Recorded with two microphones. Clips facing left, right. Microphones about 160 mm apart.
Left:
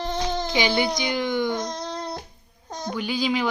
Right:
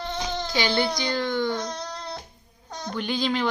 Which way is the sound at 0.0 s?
25° left (ahead or behind).